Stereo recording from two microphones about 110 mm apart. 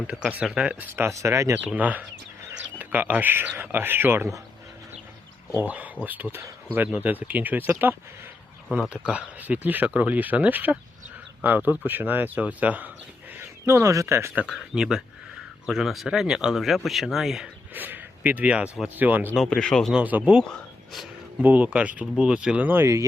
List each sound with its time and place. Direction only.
0.1 s speech: 10° right (ahead or behind)
0.9 s speech: 25° right (ahead or behind)
1.6 s speech: 15° right (ahead or behind)
5.5 s speech: 15° right (ahead or behind)
13.7 s speech: 25° right (ahead or behind)
14.4 s speech: 5° right (ahead or behind)
17.7 s speech: 15° right (ahead or behind)
19.4 s speech: 5° left (ahead or behind)
19.9 s speech: 15° right (ahead or behind)
20.5 s a sound: centre (ahead or behind)
21.4 s speech: 15° right (ahead or behind)